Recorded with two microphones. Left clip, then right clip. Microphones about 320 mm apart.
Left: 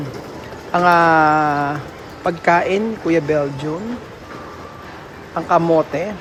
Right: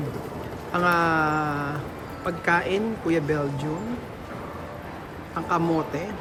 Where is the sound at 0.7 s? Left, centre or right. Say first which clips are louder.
Left 9 dB; centre.